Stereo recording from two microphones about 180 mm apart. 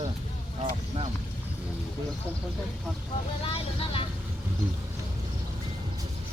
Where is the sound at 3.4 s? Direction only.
30° left (ahead or behind).